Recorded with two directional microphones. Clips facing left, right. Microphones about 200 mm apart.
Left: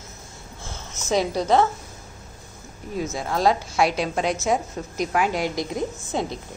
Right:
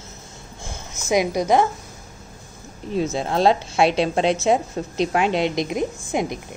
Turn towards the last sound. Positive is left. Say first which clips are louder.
# right 3 dB
turn(degrees=-15)  # may be behind; listen again after turning